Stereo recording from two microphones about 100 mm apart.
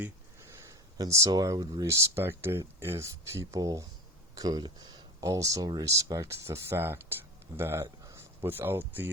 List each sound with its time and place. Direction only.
0.4 s speech: 35° right (ahead or behind)
1.9 s speech: 25° right (ahead or behind)